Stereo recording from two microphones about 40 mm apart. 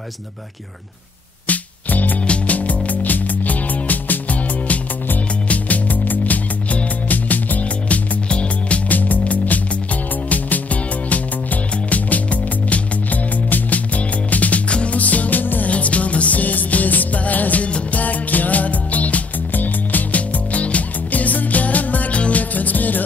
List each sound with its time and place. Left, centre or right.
1.5 s music: left
2.2 s music: left
8.3 s music: left
8.8 s music: left
15.7 s music: left